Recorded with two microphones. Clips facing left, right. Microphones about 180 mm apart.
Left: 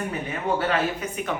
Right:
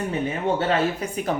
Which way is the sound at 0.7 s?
35° right (ahead or behind).